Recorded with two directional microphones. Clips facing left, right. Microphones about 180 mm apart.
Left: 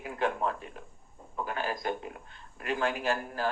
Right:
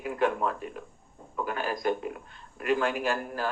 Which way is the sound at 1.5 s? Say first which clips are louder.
Right 1 dB; 25° left (ahead or behind).